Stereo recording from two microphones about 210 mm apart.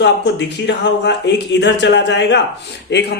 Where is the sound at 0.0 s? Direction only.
55° left (ahead or behind).